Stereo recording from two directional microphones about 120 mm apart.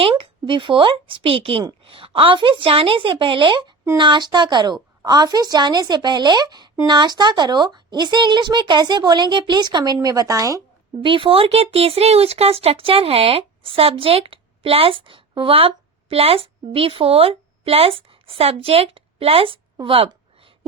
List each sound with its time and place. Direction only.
0.0 s speech: 50° right (ahead or behind); by 10.6 s 30° right (ahead or behind)
11.0 s speech: 45° right (ahead or behind)
19.7 s a sound: 45° right (ahead or behind)